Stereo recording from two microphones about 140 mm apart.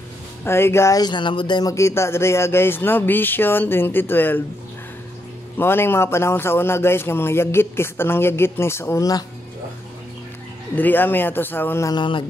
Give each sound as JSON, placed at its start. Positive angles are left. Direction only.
{"t": 0.5, "sound": "speech", "side_deg": 20}
{"t": 5.6, "sound": "speech", "side_deg": 15}
{"t": 10.8, "sound": "speech", "side_deg": 15}
{"t": 11.9, "sound": "a man's voice", "side_deg": 35}